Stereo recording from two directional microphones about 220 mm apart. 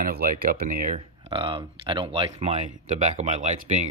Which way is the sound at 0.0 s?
40° right (ahead or behind).